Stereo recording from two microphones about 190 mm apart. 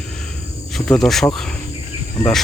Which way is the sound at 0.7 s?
Centre (ahead or behind).